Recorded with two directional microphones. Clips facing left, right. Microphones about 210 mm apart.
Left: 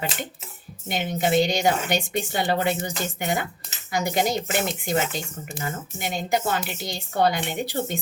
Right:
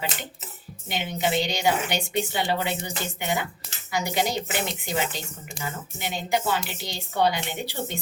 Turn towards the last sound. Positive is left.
turn(degrees=50)  # may be behind; listen again after turning